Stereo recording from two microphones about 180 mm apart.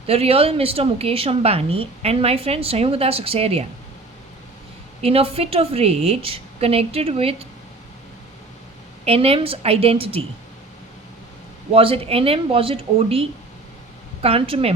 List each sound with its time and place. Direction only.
0.1 s a woman's voice: 35° right (ahead or behind)
5.0 s a woman's voice: 35° right (ahead or behind)
9.0 s a woman's voice: 35° right (ahead or behind)
11.7 s a woman's voice: 30° right (ahead or behind)